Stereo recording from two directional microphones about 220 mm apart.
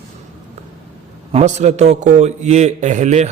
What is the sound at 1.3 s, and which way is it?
A man's voice, 30° right (ahead or behind).